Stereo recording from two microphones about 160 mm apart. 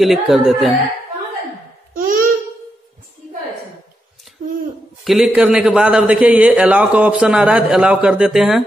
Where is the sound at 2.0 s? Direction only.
60° right (ahead or behind).